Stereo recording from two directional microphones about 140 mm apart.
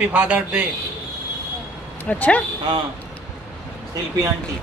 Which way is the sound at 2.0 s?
10° left (ahead or behind).